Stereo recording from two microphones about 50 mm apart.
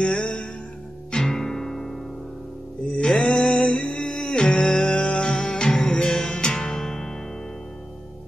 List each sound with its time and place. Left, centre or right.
0.0 s music: left
3.0 s music: centre